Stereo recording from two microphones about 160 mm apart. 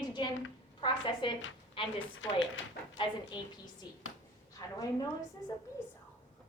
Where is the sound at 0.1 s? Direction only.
30° left (ahead or behind).